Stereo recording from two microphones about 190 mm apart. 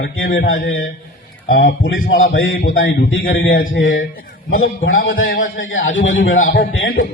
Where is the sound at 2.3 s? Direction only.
85° left.